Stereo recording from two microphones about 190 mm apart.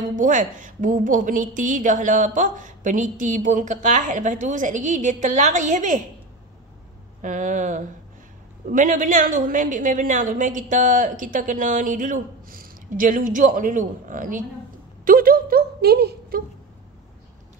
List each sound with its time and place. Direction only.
0.1 s a woman's voice: 40° right (ahead or behind)
7.2 s a woman's voice: 40° right (ahead or behind)